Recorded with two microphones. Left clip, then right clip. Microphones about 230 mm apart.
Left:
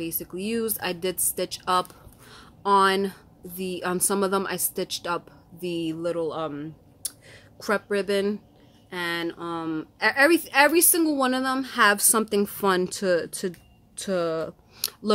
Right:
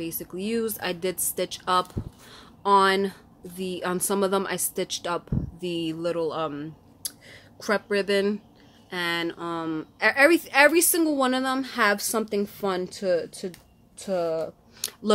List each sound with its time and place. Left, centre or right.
0.0 s speech: centre
14.8 s speech: centre